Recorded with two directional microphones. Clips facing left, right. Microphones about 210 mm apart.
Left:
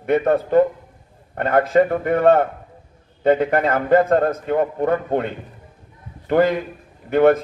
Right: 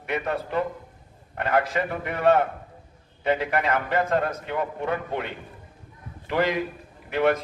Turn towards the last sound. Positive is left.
turn(degrees=50)  # may be behind; listen again after turning